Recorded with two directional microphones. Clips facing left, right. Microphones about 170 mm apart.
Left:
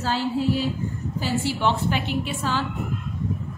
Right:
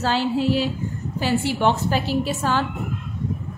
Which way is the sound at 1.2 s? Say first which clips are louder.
Right 4 dB; 55° right (ahead or behind).